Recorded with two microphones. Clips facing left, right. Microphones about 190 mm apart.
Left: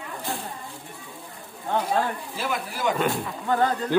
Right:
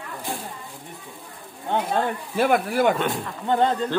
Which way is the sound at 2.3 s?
55° right (ahead or behind).